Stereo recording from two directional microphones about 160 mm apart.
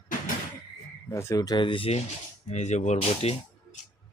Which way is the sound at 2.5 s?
45° left (ahead or behind).